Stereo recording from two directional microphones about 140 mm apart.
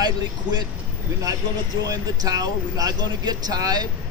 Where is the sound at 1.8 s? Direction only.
25° right (ahead or behind).